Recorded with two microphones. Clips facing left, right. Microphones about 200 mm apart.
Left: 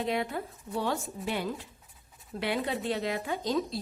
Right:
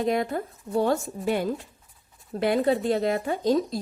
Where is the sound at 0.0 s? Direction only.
45° right (ahead or behind).